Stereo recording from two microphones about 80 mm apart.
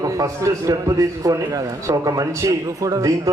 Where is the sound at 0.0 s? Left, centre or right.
Right.